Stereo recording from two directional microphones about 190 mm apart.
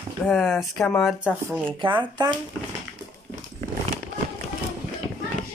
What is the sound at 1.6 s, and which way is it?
Speech, 25° right (ahead or behind).